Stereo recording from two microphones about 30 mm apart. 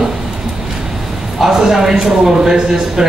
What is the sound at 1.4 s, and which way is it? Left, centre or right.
Speech, centre.